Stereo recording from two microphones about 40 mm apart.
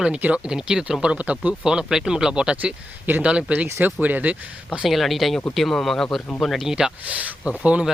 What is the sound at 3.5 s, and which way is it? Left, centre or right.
Speech, right.